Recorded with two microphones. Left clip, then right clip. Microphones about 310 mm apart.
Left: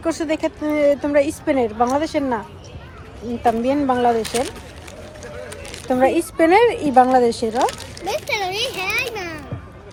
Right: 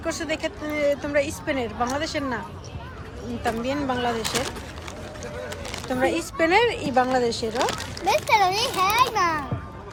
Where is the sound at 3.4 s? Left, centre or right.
Centre.